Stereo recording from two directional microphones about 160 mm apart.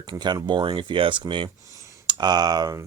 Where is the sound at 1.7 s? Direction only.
20° right (ahead or behind).